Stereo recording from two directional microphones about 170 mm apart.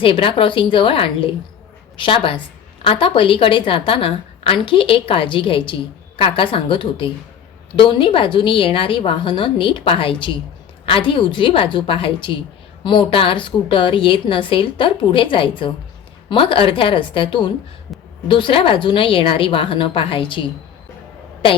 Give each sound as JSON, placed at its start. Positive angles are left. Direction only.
{"t": 0.0, "sound": "a woman's voice", "side_deg": 30}